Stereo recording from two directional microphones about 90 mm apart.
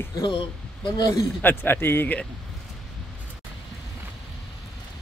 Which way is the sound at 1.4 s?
20° left (ahead or behind).